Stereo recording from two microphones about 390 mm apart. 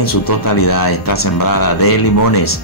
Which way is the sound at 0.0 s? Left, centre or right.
Left.